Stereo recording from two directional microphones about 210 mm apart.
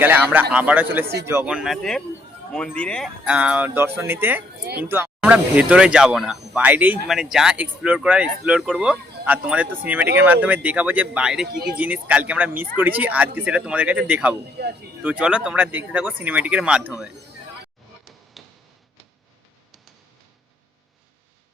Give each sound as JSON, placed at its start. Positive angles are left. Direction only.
{"t": 0.0, "sound": "speech", "side_deg": -10}
{"t": 3.2, "sound": "speech", "side_deg": -5}
{"t": 14.6, "sound": "speech", "side_deg": -50}
{"t": 15.0, "sound": "speech", "side_deg": -5}
{"t": 18.4, "sound": "a sound", "side_deg": 0}